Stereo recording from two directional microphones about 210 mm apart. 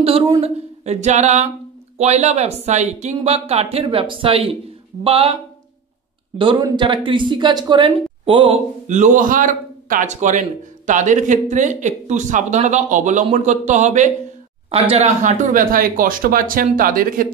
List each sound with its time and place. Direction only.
0.0 s a woman's voice: 25° right (ahead or behind)